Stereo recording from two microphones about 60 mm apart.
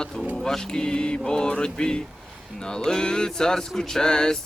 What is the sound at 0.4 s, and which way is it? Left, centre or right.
Speech, centre.